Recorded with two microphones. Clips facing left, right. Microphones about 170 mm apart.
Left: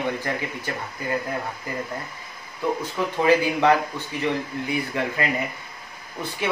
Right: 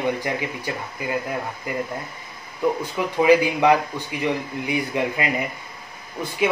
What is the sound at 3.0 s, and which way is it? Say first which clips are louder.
Speech: right 3 dB; 15° right (ahead or behind).